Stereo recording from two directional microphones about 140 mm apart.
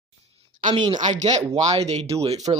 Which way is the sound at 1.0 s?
55° right (ahead or behind).